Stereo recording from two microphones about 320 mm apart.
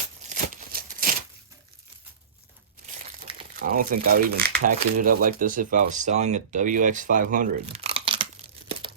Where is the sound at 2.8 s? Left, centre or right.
Centre.